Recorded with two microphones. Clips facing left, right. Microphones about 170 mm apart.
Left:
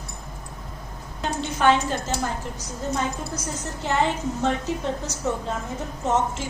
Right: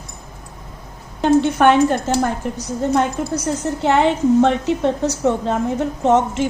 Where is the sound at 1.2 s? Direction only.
60° right (ahead or behind).